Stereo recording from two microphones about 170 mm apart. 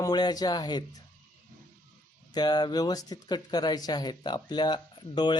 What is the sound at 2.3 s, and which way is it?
Speech, 25° left (ahead or behind).